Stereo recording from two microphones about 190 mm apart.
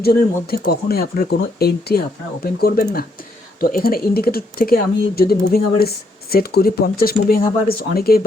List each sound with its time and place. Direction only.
0.0 s speech: 55° left (ahead or behind)